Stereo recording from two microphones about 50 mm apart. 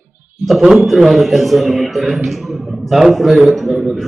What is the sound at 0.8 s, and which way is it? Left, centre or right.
A man's voice, centre.